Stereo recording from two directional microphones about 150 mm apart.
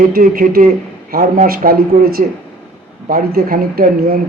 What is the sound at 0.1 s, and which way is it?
Speech, 70° right (ahead or behind).